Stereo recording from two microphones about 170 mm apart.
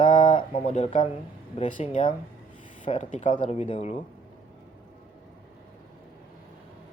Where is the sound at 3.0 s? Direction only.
45° left (ahead or behind).